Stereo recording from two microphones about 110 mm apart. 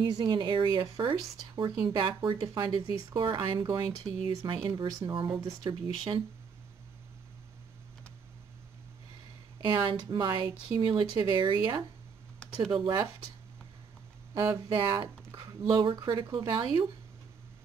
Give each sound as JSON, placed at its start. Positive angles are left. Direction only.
{"t": 0.0, "sound": "speech", "side_deg": -40}
{"t": 5.7, "sound": "speech", "side_deg": -45}
{"t": 9.6, "sound": "speech", "side_deg": -40}
{"t": 12.6, "sound": "speech", "side_deg": -45}
{"t": 14.3, "sound": "speech", "side_deg": -35}